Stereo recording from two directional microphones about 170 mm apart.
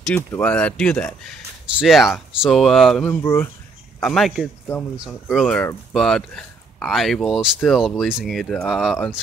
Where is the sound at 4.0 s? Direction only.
Centre (ahead or behind).